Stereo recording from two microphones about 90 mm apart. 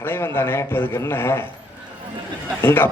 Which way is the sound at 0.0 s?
30° left (ahead or behind).